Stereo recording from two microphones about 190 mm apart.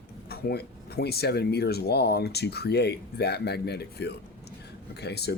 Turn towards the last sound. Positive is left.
turn(degrees=60)  # may be behind; listen again after turning